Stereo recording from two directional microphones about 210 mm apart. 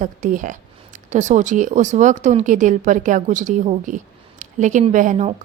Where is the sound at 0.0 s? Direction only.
40° right (ahead or behind).